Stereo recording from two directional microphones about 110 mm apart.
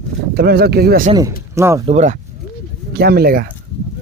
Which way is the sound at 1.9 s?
90° right.